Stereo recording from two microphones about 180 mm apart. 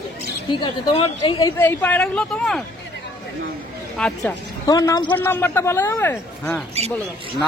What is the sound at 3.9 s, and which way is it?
Speech, 5° left (ahead or behind).